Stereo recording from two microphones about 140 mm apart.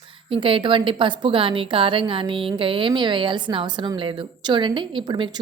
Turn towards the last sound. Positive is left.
turn(degrees=-30)  # may be behind; listen again after turning